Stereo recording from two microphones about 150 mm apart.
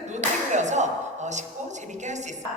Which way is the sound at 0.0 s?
50° right (ahead or behind).